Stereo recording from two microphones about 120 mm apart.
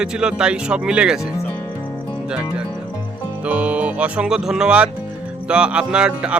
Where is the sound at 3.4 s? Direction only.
10° right (ahead or behind).